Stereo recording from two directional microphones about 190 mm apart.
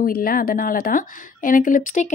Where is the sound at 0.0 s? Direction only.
50° left (ahead or behind).